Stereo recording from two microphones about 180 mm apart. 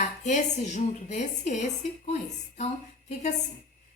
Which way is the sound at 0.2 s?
40° left (ahead or behind).